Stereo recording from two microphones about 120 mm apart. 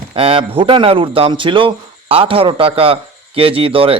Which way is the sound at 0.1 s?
50° right (ahead or behind).